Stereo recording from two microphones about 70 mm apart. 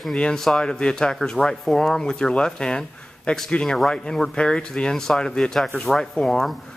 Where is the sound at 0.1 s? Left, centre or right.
Centre.